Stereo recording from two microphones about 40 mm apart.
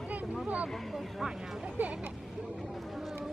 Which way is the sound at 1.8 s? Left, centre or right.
Right.